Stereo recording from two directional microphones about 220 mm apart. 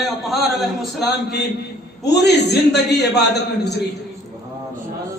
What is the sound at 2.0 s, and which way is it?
Speech, 50° left (ahead or behind).